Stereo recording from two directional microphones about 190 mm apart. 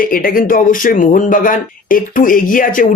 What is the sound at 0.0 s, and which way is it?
A man's voice, 50° left (ahead or behind).